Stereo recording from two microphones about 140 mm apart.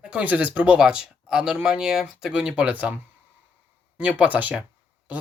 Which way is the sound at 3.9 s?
10° right (ahead or behind).